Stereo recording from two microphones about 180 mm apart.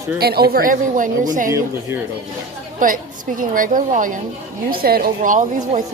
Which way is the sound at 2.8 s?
50° right (ahead or behind).